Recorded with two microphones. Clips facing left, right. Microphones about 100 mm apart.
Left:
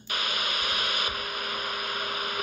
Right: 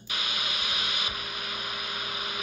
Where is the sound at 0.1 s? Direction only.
50° left (ahead or behind).